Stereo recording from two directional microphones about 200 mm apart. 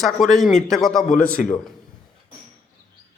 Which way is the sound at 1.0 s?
40° left (ahead or behind).